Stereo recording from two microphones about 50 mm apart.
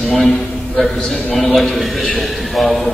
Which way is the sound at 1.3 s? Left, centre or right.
Centre.